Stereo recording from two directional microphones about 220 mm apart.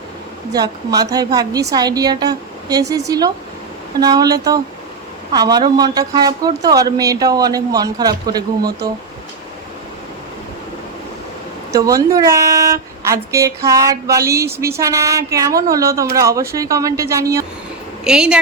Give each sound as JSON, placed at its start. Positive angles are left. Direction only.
{"t": 0.5, "sound": "a woman's voice", "side_deg": -15}
{"t": 11.7, "sound": "a woman's voice", "side_deg": -15}